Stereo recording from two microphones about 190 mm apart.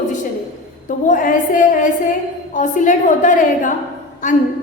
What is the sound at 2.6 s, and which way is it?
A woman's voice, 40° left (ahead or behind).